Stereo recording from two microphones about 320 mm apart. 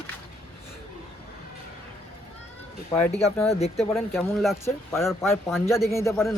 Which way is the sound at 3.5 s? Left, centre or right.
Centre.